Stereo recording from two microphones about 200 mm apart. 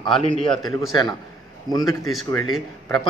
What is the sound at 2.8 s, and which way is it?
Speech, 20° left (ahead or behind).